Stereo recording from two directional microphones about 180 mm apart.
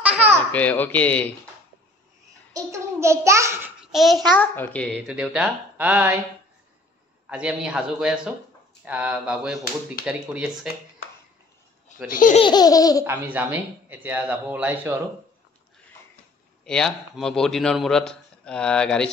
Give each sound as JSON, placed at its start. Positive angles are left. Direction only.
{"t": 0.0, "sound": "baby laughter", "side_deg": -5}
{"t": 0.5, "sound": "speech", "side_deg": 10}
{"t": 2.5, "sound": "a child's voice", "side_deg": -15}
{"t": 3.8, "sound": "a man's voice", "side_deg": 0}
{"t": 7.2, "sound": "a man's voice", "side_deg": -5}
{"t": 12.1, "sound": "speech", "side_deg": 50}
{"t": 12.4, "sound": "laughter", "side_deg": 25}
{"t": 13.0, "sound": "speech", "side_deg": -10}
{"t": 16.6, "sound": "a man's voice", "side_deg": 5}